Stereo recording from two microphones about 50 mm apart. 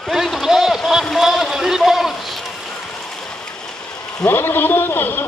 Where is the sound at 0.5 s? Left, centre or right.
Centre.